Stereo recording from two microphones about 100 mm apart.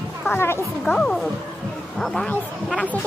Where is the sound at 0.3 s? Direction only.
25° left (ahead or behind).